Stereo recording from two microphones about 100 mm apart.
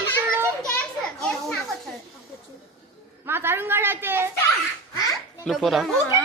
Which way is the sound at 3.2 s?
25° right (ahead or behind).